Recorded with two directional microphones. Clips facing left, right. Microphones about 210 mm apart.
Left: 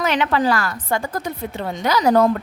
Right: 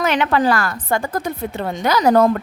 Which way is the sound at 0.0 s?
50° right (ahead or behind).